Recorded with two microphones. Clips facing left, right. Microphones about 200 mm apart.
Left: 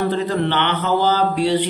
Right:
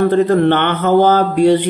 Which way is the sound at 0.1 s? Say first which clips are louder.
Right 8 dB; 55° right (ahead or behind).